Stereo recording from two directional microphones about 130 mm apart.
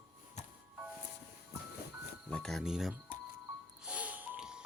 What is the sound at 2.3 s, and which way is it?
Speech, 5° left (ahead or behind).